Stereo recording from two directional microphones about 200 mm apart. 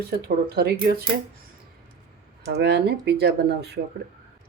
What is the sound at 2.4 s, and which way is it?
Speech, 55° right (ahead or behind).